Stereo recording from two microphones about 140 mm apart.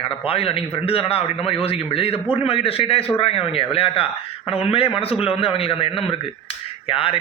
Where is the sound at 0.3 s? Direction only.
45° left (ahead or behind).